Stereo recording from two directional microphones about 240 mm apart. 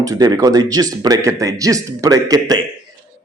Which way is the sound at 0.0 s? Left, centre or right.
Centre.